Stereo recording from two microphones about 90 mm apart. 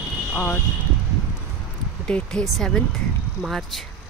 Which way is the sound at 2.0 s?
10° left (ahead or behind).